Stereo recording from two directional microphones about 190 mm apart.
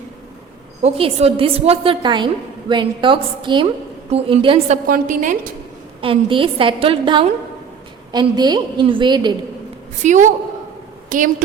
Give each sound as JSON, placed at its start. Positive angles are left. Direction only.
{"t": 0.8, "sound": "a woman's voice", "side_deg": -30}
{"t": 4.9, "sound": "a woman's voice", "side_deg": -45}
{"t": 6.0, "sound": "a woman's voice", "side_deg": -25}
{"t": 10.0, "sound": "a woman's voice", "side_deg": -40}